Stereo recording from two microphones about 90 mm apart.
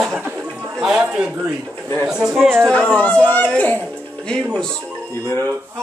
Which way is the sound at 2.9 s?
15° left (ahead or behind).